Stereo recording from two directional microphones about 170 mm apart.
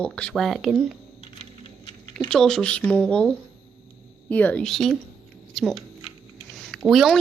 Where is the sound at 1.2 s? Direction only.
35° left (ahead or behind).